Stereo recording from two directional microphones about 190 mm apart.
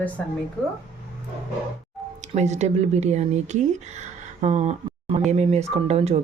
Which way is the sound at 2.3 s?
35° right (ahead or behind).